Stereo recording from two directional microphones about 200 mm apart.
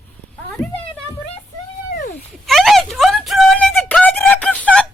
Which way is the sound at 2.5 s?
Centre (ahead or behind).